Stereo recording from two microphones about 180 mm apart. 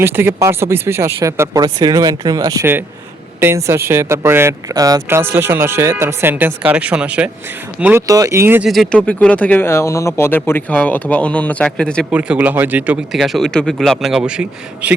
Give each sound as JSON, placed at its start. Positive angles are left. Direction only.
{"t": 0.0, "sound": "speech", "side_deg": -15}
{"t": 8.7, "sound": "speech", "side_deg": 5}
{"t": 12.1, "sound": "speech", "side_deg": -10}